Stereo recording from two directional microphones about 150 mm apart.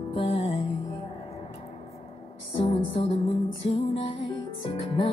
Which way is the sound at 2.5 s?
35° left (ahead or behind).